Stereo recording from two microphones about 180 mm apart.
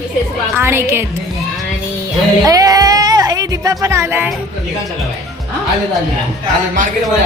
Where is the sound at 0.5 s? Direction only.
15° right (ahead or behind).